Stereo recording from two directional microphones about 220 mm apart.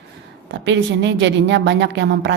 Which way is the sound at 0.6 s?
55° right (ahead or behind).